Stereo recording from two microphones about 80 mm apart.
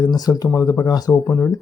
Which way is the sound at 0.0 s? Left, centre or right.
Left.